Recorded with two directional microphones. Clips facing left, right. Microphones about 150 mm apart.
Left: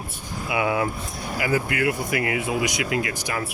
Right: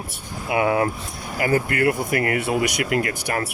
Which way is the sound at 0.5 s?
45° right (ahead or behind).